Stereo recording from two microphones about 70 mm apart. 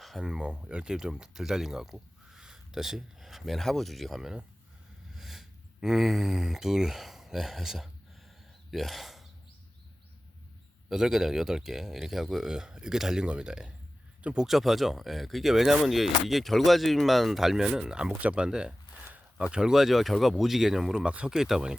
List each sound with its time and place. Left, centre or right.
0.0 s speech: centre
10.8 s speech: centre
14.4 s speech: centre